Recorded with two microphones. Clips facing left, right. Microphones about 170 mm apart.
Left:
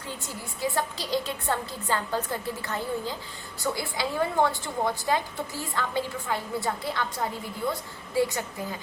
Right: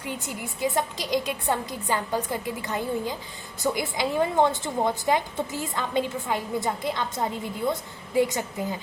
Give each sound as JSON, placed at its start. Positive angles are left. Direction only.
{"t": 0.0, "sound": "a woman's voice", "side_deg": -15}